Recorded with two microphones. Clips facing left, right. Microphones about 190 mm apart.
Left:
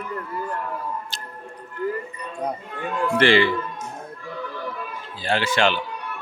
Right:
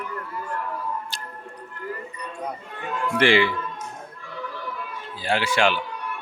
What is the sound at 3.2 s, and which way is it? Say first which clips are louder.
Speech: left 1 dB; 15° right (ahead or behind).